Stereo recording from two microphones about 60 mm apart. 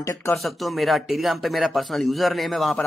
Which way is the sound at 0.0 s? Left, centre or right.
Left.